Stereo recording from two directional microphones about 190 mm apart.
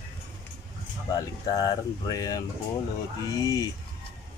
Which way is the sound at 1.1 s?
20° left (ahead or behind).